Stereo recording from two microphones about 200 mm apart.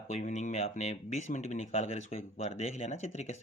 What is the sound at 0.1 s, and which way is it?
Speech, 35° left (ahead or behind).